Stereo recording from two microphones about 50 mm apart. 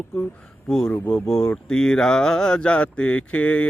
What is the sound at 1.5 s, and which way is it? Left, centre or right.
Speech, centre.